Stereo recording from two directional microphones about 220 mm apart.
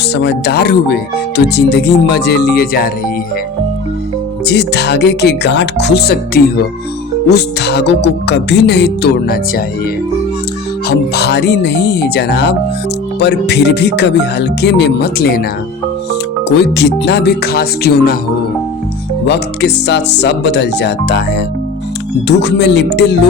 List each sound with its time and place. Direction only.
0.1 s music: 50° left (ahead or behind)
4.4 s music: 50° left (ahead or behind)
10.8 s music: 45° left (ahead or behind)
16.5 s music: 50° left (ahead or behind)
19.2 s music: 50° left (ahead or behind)